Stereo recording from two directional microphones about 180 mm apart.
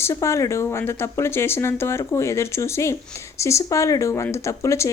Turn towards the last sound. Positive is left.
turn(degrees=15)  # may be behind; listen again after turning